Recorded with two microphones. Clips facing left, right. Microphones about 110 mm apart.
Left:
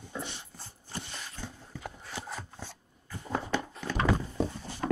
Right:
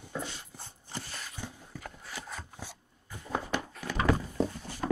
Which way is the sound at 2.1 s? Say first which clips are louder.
Left 3 dB; 25° left (ahead or behind).